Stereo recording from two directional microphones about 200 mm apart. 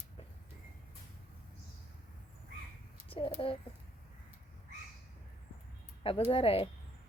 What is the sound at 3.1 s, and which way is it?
Speech, 25° left (ahead or behind).